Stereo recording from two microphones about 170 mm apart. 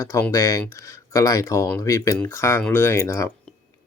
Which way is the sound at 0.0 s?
15° left (ahead or behind).